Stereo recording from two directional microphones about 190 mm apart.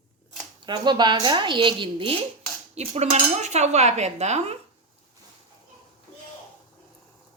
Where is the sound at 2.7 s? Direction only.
35° right (ahead or behind).